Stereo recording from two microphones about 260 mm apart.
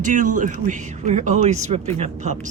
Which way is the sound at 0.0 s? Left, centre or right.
Right.